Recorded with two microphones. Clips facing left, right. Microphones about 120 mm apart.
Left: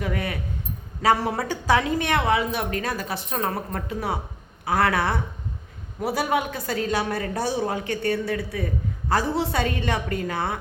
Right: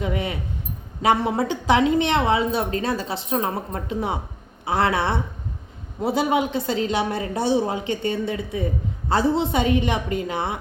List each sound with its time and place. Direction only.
0.0 s speech: 20° right (ahead or behind)